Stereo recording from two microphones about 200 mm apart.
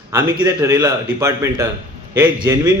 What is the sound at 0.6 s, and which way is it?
A man's voice, 15° right (ahead or behind).